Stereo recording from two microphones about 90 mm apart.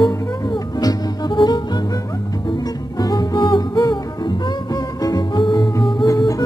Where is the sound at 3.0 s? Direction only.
50° left (ahead or behind).